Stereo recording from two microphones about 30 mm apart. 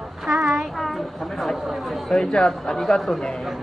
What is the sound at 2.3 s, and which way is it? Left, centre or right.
Speech, left.